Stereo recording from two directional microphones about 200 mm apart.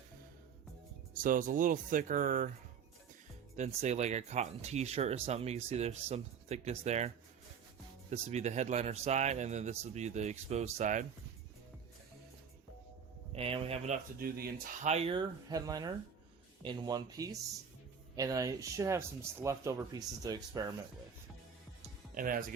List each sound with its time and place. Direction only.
1.1 s speech: 45° right (ahead or behind)
3.8 s speech: 35° right (ahead or behind)
8.1 s speech: 35° right (ahead or behind)
13.3 s speech: 30° right (ahead or behind); by 14.8 s 50° right (ahead or behind)
14.8 s speech: 30° right (ahead or behind)
22.1 s speech: 45° right (ahead or behind)